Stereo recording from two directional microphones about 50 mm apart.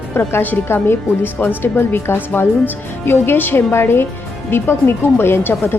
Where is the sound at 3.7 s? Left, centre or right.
Left.